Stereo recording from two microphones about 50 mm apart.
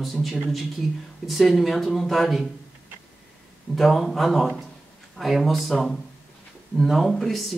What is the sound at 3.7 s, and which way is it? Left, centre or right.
Speech, centre.